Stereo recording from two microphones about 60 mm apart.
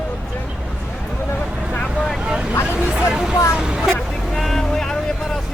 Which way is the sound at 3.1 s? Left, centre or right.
Centre.